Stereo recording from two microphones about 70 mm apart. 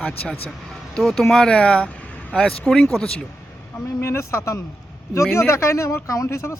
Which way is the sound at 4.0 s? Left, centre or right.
Left.